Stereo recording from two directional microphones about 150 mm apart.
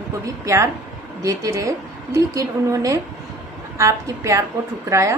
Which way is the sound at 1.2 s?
20° right (ahead or behind).